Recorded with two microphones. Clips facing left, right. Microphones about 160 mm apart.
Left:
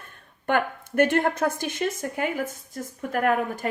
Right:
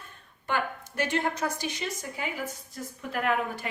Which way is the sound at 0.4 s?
55° left (ahead or behind).